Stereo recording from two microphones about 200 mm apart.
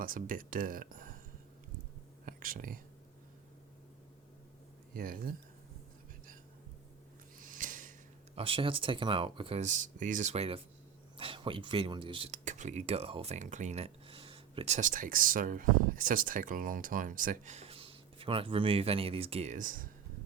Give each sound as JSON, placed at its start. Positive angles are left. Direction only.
{"t": 0.0, "sound": "speech", "side_deg": -45}
{"t": 2.2, "sound": "speech", "side_deg": -45}
{"t": 4.9, "sound": "speech", "side_deg": -45}
{"t": 7.3, "sound": "snort", "side_deg": -40}
{"t": 8.4, "sound": "speech", "side_deg": -25}